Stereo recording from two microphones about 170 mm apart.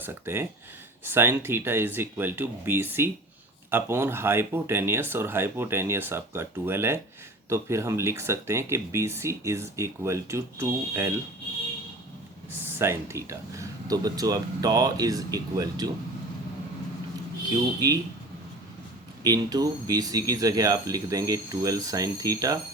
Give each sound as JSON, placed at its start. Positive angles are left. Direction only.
{"t": 0.0, "sound": "speech", "side_deg": -15}
{"t": 12.6, "sound": "speech", "side_deg": -15}
{"t": 19.2, "sound": "speech", "side_deg": -25}